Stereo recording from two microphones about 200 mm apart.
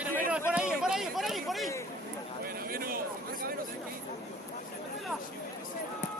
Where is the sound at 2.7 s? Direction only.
45° right (ahead or behind).